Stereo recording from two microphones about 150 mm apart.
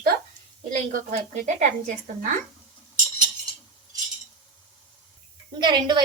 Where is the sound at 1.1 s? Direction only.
50° right (ahead or behind).